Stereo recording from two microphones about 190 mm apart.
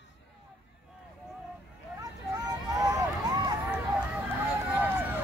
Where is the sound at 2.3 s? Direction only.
20° right (ahead or behind).